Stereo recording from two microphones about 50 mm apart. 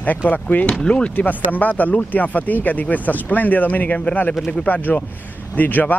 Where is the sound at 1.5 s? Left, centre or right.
Left.